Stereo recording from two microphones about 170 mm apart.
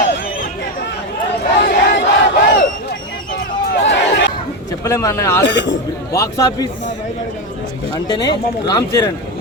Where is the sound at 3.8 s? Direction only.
90° left.